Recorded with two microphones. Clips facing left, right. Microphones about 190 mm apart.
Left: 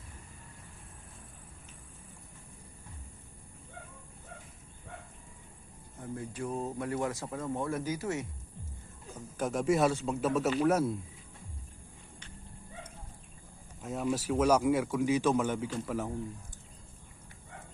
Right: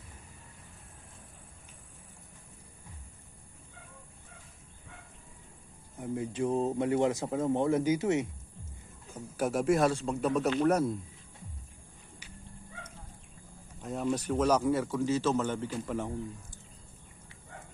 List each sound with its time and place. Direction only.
6.0 s speech: 20° right (ahead or behind)
9.4 s a man's voice: 5° right (ahead or behind)
13.8 s a man's voice: centre (ahead or behind)